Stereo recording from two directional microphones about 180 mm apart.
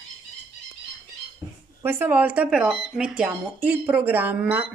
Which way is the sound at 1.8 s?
10° right (ahead or behind).